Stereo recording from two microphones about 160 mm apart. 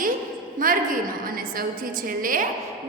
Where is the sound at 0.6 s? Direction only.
60° right (ahead or behind).